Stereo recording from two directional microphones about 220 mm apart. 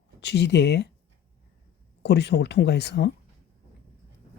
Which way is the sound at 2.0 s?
50° left (ahead or behind).